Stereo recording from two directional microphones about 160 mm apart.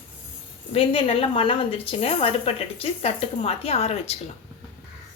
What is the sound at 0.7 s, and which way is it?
A woman's voice, 35° left (ahead or behind).